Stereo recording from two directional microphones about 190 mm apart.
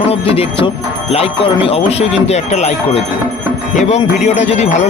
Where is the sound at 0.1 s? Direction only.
30° left (ahead or behind).